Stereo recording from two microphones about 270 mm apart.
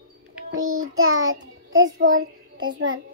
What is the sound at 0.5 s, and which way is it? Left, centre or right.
Child singing, right.